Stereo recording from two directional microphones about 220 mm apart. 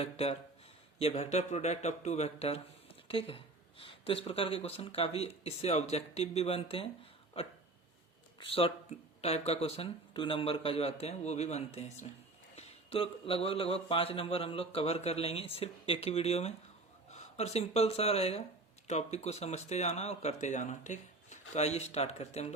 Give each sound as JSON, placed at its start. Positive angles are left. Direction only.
{"t": 0.0, "sound": "speech", "side_deg": 25}
{"t": 8.4, "sound": "speech", "side_deg": 25}